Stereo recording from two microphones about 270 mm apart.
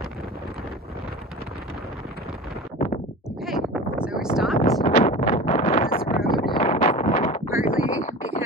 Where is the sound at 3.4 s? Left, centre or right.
Centre.